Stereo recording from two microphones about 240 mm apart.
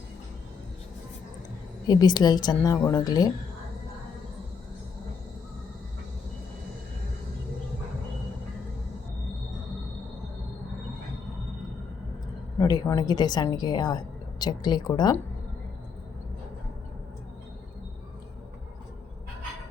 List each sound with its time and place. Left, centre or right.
1.9 s a woman's voice: centre
12.5 s speech: centre